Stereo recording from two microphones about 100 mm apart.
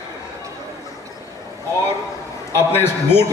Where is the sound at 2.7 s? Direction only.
25° left (ahead or behind).